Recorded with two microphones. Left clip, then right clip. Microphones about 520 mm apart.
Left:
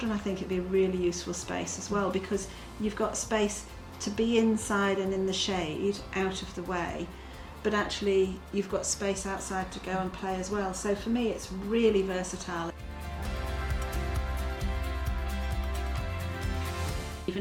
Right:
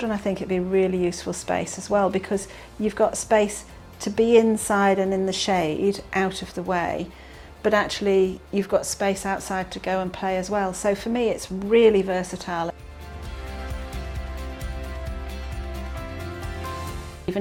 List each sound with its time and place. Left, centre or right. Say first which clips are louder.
0.0 s a woman's voice: right 7 dB; right